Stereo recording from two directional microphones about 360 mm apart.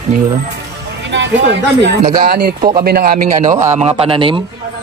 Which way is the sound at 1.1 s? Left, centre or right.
Right.